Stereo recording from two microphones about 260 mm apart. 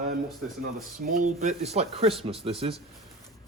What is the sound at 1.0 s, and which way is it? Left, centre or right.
Speech, right.